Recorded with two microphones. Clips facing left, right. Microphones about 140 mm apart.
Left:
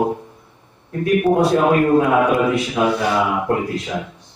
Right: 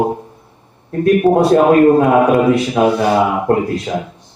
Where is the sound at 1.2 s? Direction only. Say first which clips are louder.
Right 4 dB; 40° right (ahead or behind).